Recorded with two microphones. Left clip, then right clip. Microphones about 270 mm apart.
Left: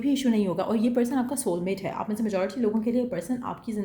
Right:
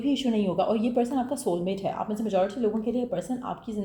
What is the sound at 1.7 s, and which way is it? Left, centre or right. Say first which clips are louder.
Speech: right 1 dB; left.